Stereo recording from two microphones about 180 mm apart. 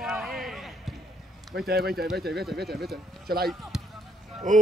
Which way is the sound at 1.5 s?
60° right (ahead or behind).